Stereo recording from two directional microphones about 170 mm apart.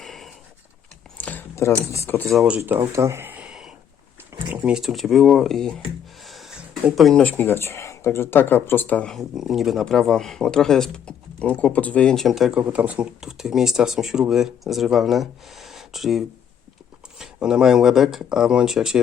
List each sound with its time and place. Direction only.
0.0 s a sound: centre (ahead or behind)
1.9 s speech: 15° left (ahead or behind)
2.2 s speech: centre (ahead or behind)
2.6 s speech: 15° right (ahead or behind)
4.4 s a sound: 30° right (ahead or behind)
4.6 s speech: 5° right (ahead or behind)